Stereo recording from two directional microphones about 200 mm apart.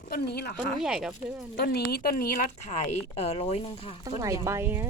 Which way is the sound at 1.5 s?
50° left (ahead or behind).